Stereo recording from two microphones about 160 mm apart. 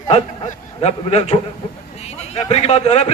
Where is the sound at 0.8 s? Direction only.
40° left (ahead or behind).